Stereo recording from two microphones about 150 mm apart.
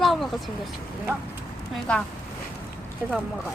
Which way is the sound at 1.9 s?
5° left (ahead or behind).